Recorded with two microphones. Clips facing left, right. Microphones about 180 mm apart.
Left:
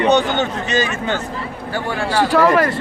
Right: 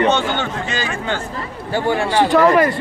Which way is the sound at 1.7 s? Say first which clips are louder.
Right 3 dB; 25° right (ahead or behind).